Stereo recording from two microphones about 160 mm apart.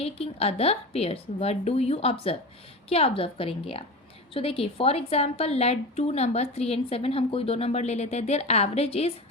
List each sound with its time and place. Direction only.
0.0 s a woman's voice: 40° left (ahead or behind)